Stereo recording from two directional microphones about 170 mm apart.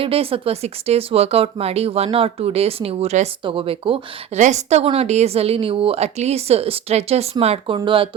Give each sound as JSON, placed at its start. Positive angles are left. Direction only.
{"t": 0.0, "sound": "a woman's voice", "side_deg": -35}